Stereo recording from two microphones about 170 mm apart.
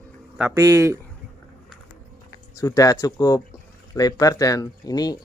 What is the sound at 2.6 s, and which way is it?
Speech, 20° left (ahead or behind).